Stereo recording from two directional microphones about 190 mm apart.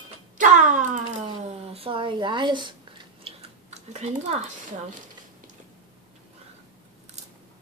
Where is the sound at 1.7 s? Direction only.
30° right (ahead or behind).